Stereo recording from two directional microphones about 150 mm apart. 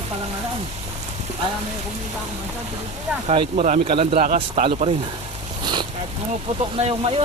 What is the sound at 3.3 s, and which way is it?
Speech, 45° right (ahead or behind).